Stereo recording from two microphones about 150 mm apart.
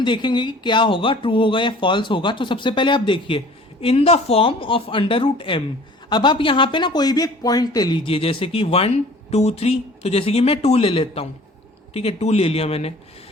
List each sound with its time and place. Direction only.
0.0 s speech: 30° left (ahead or behind)